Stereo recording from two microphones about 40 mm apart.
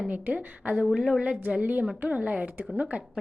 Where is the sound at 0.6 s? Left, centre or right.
Right.